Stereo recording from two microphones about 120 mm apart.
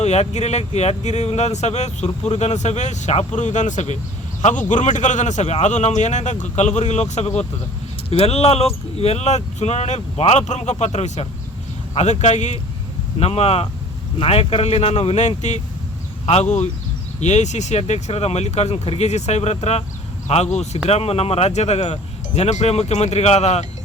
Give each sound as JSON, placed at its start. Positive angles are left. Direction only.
{"t": 0.0, "sound": "speech", "side_deg": 70}
{"t": 8.1, "sound": "speech", "side_deg": 55}
{"t": 13.1, "sound": "speech", "side_deg": 60}